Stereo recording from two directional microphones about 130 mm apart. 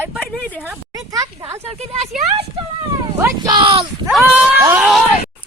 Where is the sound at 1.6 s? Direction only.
55° right (ahead or behind).